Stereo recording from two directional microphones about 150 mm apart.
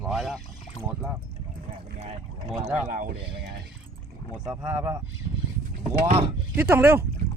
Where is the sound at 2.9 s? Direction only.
65° right (ahead or behind).